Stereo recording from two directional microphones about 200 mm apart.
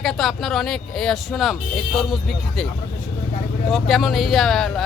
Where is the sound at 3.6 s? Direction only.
Centre (ahead or behind).